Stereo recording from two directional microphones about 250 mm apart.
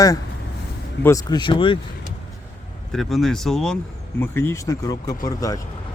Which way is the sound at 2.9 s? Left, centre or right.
Centre.